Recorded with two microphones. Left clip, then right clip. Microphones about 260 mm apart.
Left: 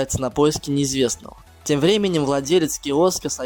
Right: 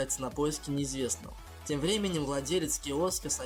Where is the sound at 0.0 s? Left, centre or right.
Left.